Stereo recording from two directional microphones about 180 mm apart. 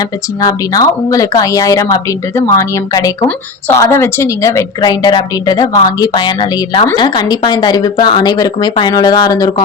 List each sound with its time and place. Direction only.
0.0 s a woman's voice: 20° left (ahead or behind)